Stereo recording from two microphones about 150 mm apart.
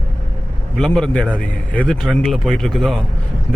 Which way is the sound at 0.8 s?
5° left (ahead or behind).